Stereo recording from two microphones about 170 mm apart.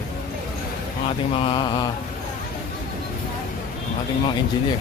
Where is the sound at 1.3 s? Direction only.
35° left (ahead or behind).